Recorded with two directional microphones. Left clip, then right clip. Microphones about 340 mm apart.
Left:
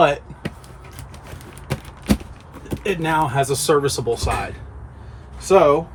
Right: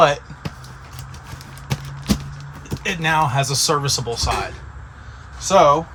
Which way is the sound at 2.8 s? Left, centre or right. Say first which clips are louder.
Right 1 dB; centre.